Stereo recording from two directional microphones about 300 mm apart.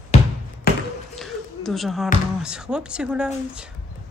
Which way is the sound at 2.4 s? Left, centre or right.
Centre.